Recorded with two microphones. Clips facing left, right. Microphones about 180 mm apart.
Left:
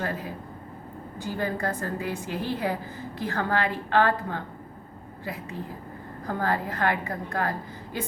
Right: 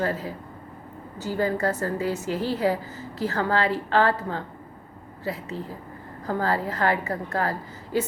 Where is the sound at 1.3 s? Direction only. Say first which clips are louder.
Right 4 dB; 20° left (ahead or behind).